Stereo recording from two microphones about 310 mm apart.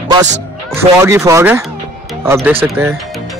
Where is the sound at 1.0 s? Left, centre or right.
Centre.